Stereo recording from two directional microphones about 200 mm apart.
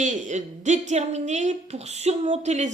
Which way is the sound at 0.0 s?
35° right (ahead or behind).